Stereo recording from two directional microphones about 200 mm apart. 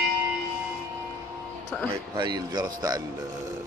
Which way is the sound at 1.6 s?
5° left (ahead or behind).